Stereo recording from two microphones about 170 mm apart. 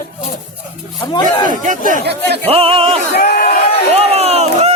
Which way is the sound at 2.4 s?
35° right (ahead or behind).